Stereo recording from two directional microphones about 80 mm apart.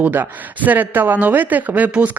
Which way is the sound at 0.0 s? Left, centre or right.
Right.